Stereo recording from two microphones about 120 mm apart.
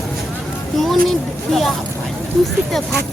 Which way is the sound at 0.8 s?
Centre (ahead or behind).